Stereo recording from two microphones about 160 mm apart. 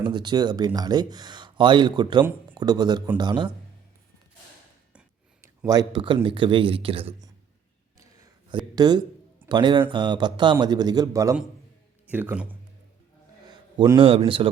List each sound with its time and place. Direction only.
0.0 s speech: 30° right (ahead or behind)
5.4 s speech: 20° right (ahead or behind)
8.4 s a man's voice: 25° right (ahead or behind); by 12.5 s 10° right (ahead or behind)
13.7 s speech: 30° right (ahead or behind)